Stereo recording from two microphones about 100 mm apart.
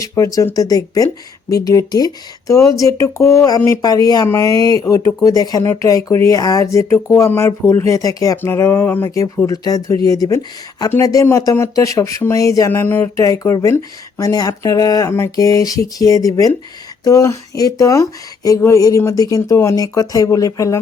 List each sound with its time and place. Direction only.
0.1 s speech: 35° left (ahead or behind)
8.4 s a sound: 25° left (ahead or behind)
9.0 s speech: 40° left (ahead or behind); by 13.1 s 20° left (ahead or behind)
13.1 s speech: 35° left (ahead or behind)